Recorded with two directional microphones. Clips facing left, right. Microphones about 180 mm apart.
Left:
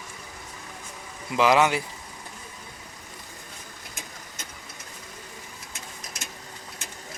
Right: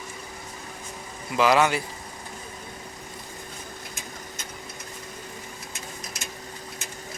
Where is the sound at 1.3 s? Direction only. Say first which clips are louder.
Even; 15° left (ahead or behind).